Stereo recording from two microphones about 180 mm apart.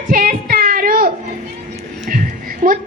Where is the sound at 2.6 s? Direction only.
50° right (ahead or behind).